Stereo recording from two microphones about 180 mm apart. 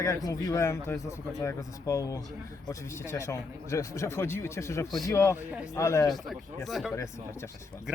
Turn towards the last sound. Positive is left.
turn(degrees=0)  # may be behind; listen again after turning